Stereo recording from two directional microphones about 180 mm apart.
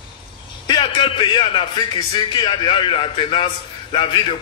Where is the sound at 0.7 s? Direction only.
25° left (ahead or behind).